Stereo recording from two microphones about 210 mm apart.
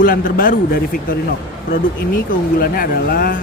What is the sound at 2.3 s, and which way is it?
Speech, 45° left (ahead or behind).